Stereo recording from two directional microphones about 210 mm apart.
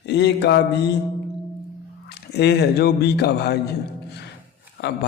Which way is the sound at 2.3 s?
50° left (ahead or behind).